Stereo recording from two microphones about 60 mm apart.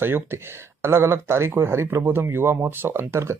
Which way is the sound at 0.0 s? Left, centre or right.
Right.